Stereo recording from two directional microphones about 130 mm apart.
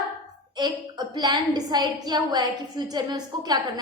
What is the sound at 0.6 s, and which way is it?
A woman's voice, 35° right (ahead or behind).